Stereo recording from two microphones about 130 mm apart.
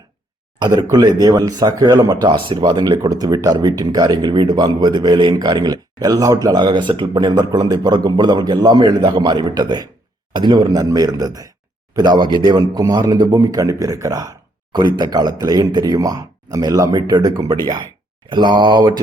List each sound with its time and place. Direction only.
0.8 s speech: 35° right (ahead or behind)